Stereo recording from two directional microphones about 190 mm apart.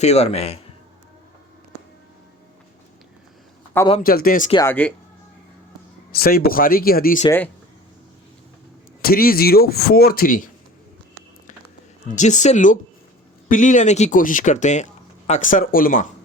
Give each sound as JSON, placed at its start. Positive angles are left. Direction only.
{"t": 0.0, "sound": "speech", "side_deg": 35}
{"t": 4.0, "sound": "speech", "side_deg": 50}
{"t": 4.5, "sound": "speech", "side_deg": 10}
{"t": 6.1, "sound": "speech", "side_deg": 50}
{"t": 7.3, "sound": "speech", "side_deg": 10}
{"t": 9.0, "sound": "speech", "side_deg": 50}
{"t": 12.0, "sound": "speech", "side_deg": 40}